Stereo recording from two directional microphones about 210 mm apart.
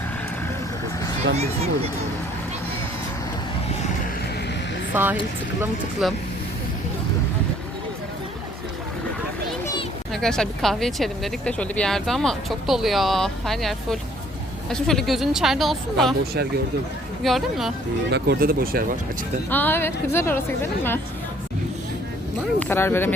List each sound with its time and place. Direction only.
1.4 s speech: 30° right (ahead or behind)
4.9 s speech: 10° right (ahead or behind)
10.1 s speech: centre (ahead or behind)
17.2 s speech: centre (ahead or behind)
18.1 s speech: 45° right (ahead or behind)
19.5 s a woman's voice: 10° left (ahead or behind)
22.6 s a woman's voice: 10° left (ahead or behind)